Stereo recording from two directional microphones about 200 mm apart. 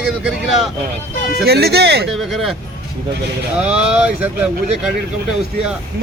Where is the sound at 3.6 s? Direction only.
5° right (ahead or behind).